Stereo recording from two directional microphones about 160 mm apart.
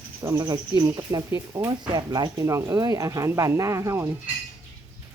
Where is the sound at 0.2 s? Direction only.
15° right (ahead or behind).